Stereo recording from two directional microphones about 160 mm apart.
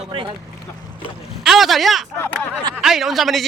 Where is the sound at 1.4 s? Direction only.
Centre (ahead or behind).